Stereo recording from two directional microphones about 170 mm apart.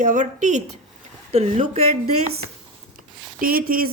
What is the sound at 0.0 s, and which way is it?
A woman's voice, 50° right (ahead or behind).